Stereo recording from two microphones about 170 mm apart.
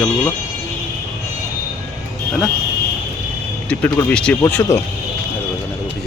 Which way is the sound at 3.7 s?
5° left (ahead or behind).